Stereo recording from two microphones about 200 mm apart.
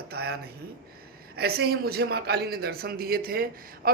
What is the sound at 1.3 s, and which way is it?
Speech, 50° right (ahead or behind).